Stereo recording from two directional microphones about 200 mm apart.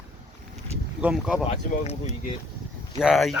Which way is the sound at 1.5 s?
35° left (ahead or behind).